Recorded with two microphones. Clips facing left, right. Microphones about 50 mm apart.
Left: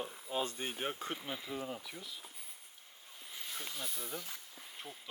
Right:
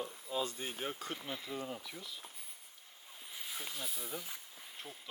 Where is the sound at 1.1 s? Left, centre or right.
Centre.